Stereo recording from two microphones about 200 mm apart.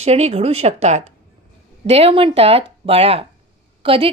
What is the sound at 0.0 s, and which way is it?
A woman's voice, 30° right (ahead or behind).